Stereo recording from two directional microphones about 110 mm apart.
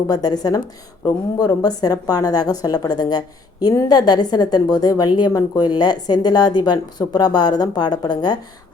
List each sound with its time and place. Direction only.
0.1 s a woman's voice: 35° left (ahead or behind)